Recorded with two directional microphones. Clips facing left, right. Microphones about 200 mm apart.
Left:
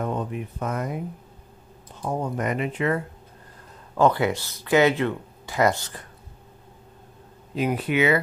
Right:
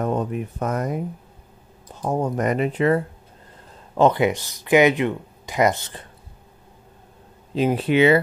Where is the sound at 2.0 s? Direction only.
40° right (ahead or behind).